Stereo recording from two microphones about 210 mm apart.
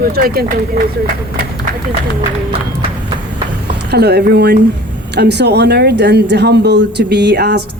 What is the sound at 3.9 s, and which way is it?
Speech, 50° right (ahead or behind).